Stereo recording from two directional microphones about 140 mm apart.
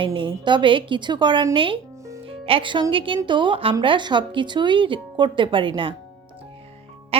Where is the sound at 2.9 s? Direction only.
40° right (ahead or behind).